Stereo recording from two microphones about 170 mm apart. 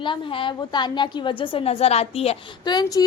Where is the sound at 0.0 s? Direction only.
30° left (ahead or behind).